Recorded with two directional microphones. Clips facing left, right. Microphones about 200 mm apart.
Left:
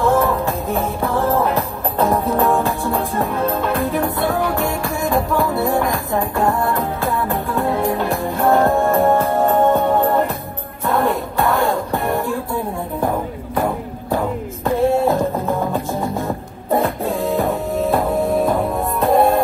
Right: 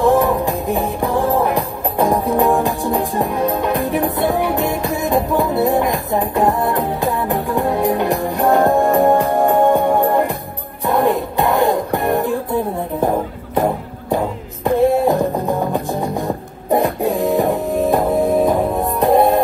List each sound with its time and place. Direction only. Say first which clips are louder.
0.0 s music: right 2 dB; 15° right (ahead or behind)
14.1 s music: right 1 dB; 15° right (ahead or behind)